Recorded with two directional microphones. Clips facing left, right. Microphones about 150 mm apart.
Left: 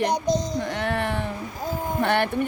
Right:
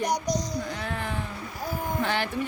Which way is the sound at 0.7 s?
75° left (ahead or behind).